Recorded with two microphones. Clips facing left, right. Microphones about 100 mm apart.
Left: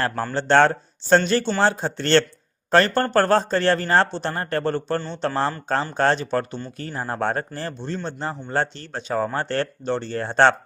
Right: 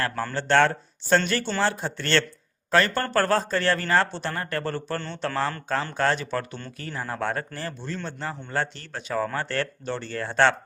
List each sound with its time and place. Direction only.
0.3 s a man's voice: 30° left (ahead or behind)